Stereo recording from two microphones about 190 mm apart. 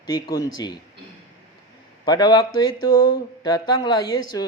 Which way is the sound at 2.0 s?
20° left (ahead or behind).